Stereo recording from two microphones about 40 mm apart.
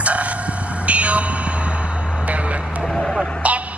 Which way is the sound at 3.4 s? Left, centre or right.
Right.